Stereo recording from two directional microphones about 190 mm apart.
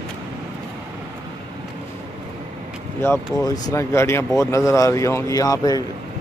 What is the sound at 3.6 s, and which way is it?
Speech, 15° left (ahead or behind).